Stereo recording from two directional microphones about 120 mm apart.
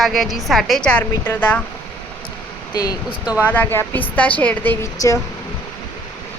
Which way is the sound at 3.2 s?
10° right (ahead or behind).